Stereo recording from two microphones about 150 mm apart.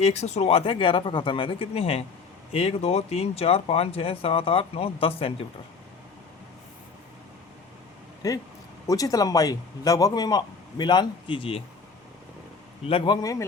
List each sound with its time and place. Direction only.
0.0 s speech: 45° left (ahead or behind)
8.2 s speech: 20° left (ahead or behind)
13.1 s speech: 30° left (ahead or behind)